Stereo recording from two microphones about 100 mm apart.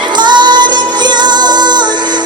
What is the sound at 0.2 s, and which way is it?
Music, 50° right (ahead or behind).